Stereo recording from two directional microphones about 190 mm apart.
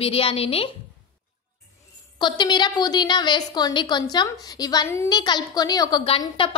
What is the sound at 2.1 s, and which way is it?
A woman's voice, 25° left (ahead or behind).